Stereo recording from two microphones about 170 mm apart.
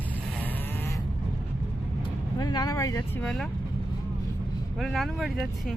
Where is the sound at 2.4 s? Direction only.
25° left (ahead or behind).